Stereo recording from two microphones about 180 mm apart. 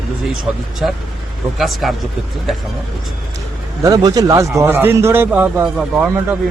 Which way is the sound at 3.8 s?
20° right (ahead or behind).